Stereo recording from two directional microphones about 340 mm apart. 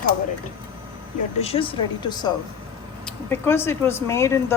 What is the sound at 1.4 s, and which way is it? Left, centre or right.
Speech, centre.